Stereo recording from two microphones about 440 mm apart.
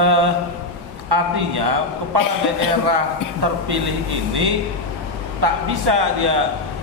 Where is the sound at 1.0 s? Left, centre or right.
Right.